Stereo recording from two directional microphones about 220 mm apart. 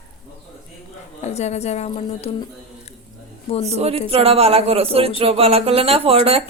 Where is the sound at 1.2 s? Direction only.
30° left (ahead or behind).